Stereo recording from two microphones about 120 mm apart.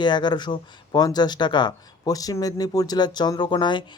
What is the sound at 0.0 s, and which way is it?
Speech, 40° left (ahead or behind).